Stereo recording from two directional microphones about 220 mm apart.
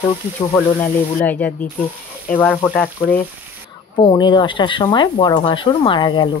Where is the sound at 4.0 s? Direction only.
20° left (ahead or behind).